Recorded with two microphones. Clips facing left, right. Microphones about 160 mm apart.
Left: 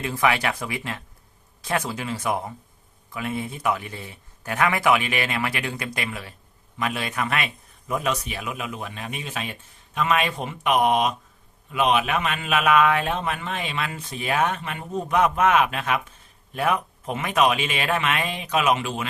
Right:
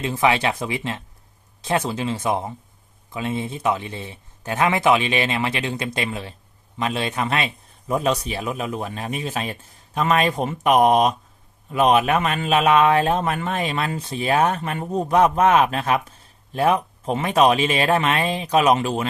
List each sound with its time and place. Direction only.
0.0 s a man's voice: 25° right (ahead or behind)